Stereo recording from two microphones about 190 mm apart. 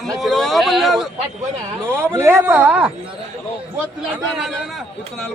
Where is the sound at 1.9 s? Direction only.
10° right (ahead or behind).